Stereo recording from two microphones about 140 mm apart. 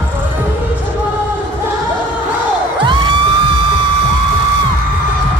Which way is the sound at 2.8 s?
35° right (ahead or behind).